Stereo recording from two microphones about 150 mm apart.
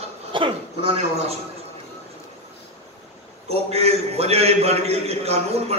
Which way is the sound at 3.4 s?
45° right (ahead or behind).